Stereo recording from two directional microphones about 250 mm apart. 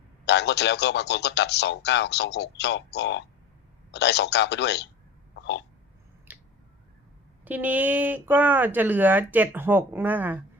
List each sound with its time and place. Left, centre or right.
0.3 s a man's voice: left
5.3 s hiccup: left
6.3 s a sound: centre
7.4 s speech: centre